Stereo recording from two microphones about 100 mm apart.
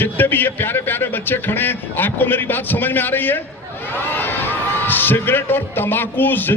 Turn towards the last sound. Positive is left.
turn(degrees=20)  # may be behind; listen again after turning